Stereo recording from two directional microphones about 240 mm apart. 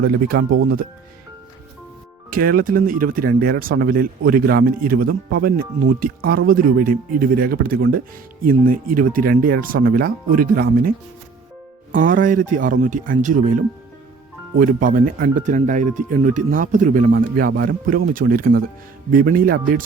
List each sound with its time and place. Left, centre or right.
0.0 s speech: right
2.3 s speech: right